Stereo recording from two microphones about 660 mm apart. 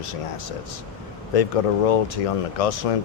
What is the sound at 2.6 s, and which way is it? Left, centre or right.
Speech, left.